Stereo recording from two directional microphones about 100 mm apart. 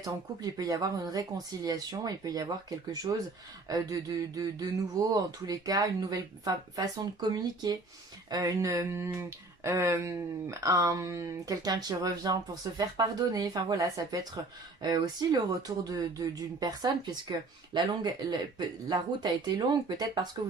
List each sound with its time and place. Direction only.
0.5 s speech: 35° right (ahead or behind)